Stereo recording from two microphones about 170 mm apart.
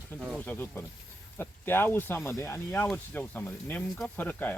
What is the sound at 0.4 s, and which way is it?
Speech, 10° left (ahead or behind).